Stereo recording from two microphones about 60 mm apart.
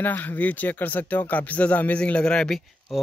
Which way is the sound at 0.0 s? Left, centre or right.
Left.